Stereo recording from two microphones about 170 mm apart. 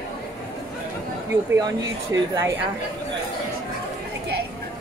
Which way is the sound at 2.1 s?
15° right (ahead or behind).